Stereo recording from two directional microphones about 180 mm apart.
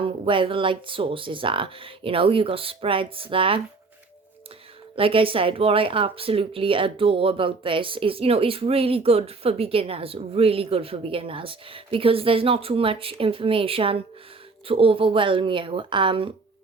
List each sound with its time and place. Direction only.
0.0 s speech: 30° right (ahead or behind)
4.9 s speech: 30° right (ahead or behind)